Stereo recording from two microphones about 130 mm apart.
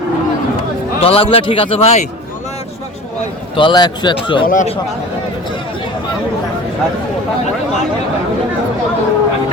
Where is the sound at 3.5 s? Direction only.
35° left (ahead or behind).